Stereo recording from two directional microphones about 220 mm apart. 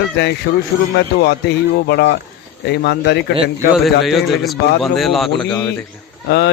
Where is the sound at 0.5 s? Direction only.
45° left (ahead or behind).